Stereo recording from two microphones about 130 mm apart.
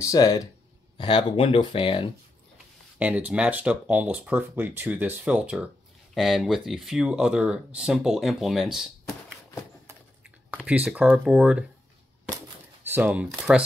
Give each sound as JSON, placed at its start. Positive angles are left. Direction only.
{"t": 0.0, "sound": "speech", "side_deg": 25}
{"t": 0.9, "sound": "speech", "side_deg": 40}
{"t": 3.0, "sound": "speech", "side_deg": -10}
{"t": 10.5, "sound": "speech", "side_deg": -10}
{"t": 12.9, "sound": "speech", "side_deg": -10}